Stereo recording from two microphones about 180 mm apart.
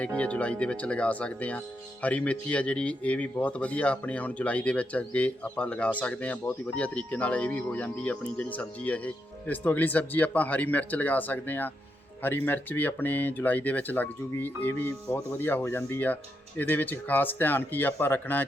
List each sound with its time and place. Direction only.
0.0 s speech: 5° left (ahead or behind)